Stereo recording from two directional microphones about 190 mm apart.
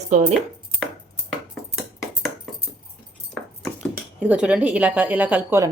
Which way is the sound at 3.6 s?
Centre (ahead or behind).